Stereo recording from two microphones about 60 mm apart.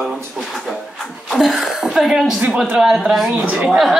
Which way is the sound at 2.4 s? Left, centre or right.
Centre.